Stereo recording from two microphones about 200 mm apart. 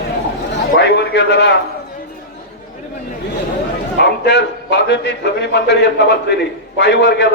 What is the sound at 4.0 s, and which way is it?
A man's voice, 60° left (ahead or behind).